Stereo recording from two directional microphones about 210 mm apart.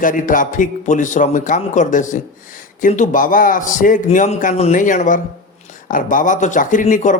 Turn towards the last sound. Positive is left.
turn(degrees=35)  # may be behind; listen again after turning